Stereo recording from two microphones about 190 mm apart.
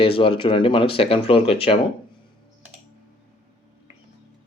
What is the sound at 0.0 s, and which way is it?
Speech, 30° left (ahead or behind).